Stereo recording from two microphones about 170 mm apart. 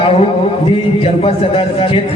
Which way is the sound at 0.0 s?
35° left (ahead or behind).